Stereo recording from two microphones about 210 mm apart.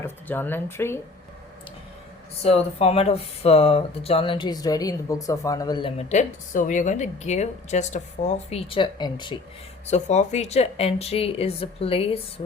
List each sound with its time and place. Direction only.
0.0 s speech: 10° left (ahead or behind)
2.4 s speech: 30° left (ahead or behind)
9.8 s speech: 35° left (ahead or behind)